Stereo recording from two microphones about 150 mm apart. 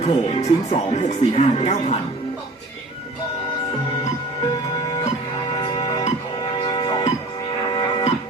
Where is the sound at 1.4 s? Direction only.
50° left (ahead or behind).